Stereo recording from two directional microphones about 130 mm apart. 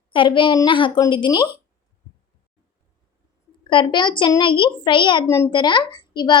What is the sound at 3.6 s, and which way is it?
A woman's voice, 35° left (ahead or behind).